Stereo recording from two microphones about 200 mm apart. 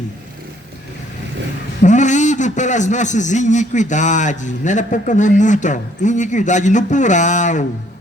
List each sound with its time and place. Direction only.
1.8 s a man's voice: 35° left (ahead or behind)